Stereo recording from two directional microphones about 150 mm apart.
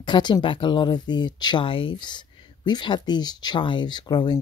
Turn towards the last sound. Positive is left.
turn(degrees=30)  # may be behind; listen again after turning